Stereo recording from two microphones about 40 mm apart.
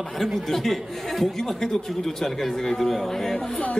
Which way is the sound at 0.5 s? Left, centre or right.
Centre.